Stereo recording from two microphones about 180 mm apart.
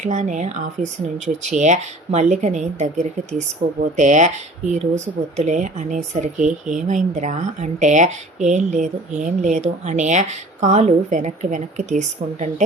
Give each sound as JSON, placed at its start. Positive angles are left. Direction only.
{"t": 0.0, "sound": "speech", "side_deg": -45}